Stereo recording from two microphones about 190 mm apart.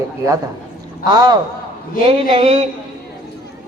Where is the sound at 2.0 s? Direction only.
30° right (ahead or behind).